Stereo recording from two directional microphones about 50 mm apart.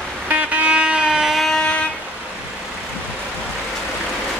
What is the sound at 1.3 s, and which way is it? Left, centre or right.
Vehicle, centre.